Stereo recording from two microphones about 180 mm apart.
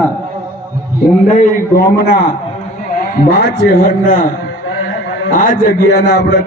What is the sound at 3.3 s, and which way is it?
Speech, 60° left (ahead or behind).